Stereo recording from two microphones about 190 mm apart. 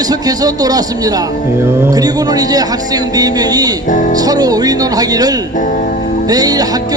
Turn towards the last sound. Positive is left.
turn(degrees=-20)  # may be behind; listen again after turning